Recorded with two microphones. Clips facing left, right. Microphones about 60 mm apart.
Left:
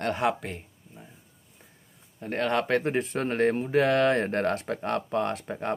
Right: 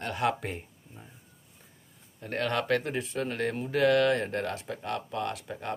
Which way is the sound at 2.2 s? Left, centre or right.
Centre.